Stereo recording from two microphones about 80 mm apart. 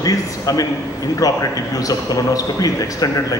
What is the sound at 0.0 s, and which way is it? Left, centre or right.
A man's voice, left.